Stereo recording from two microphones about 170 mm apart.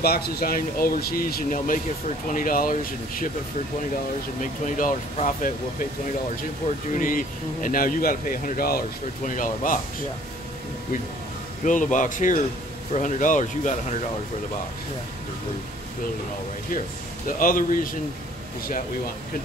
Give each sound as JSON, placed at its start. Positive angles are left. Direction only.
{"t": 0.0, "sound": "speech", "side_deg": 65}
{"t": 4.4, "sound": "speech", "side_deg": 50}
{"t": 7.0, "sound": "speech", "side_deg": 50}
{"t": 11.6, "sound": "speech", "side_deg": 50}
{"t": 17.4, "sound": "speech", "side_deg": 55}